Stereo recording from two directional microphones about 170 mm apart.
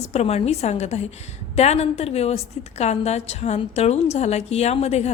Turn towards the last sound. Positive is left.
turn(degrees=40)  # may be behind; listen again after turning